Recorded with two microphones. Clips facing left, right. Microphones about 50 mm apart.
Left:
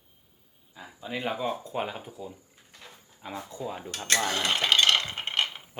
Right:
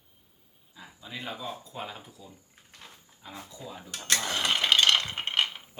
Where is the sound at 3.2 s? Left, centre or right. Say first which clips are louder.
Left 6 dB; left.